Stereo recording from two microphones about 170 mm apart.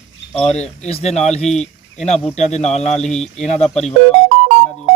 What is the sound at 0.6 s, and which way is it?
Speech, 40° left (ahead or behind).